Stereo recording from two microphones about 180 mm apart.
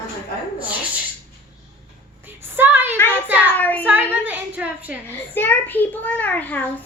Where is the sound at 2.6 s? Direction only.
10° right (ahead or behind).